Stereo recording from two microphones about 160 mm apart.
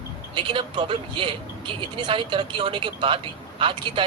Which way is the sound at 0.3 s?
30° right (ahead or behind).